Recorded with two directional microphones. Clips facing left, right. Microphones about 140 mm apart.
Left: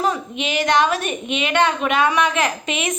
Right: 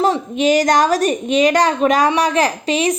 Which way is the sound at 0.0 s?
40° right (ahead or behind).